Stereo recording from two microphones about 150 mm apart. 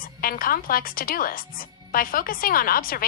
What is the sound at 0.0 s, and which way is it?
Speech, 70° left (ahead or behind).